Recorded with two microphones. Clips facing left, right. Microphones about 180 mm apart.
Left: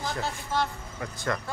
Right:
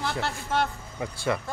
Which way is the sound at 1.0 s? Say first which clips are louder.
Right 3 dB; 10° right (ahead or behind).